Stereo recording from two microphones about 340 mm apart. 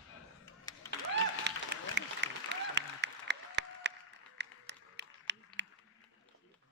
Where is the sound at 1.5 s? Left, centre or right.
Right.